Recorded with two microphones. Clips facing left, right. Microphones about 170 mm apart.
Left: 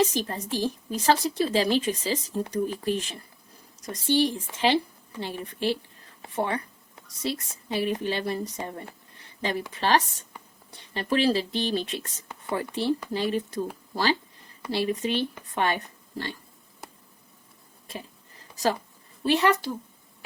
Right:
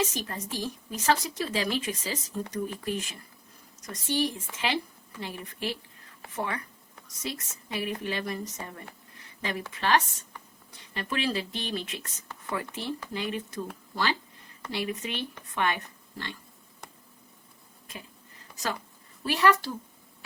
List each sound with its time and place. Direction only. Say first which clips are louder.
0.0 s a woman's voice: left 6 dB; 35° left (ahead or behind)
16.8 s a sound: left 3 dB; 5° left (ahead or behind)
18.5 s speech: left 8 dB; 35° left (ahead or behind)
19.2 s a woman's voice: left 2 dB; 20° left (ahead or behind)